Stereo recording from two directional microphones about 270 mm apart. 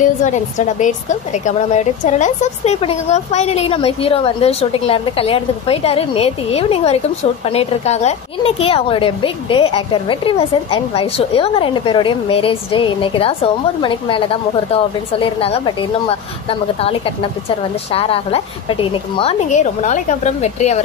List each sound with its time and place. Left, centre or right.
0.0 s a woman's voice: left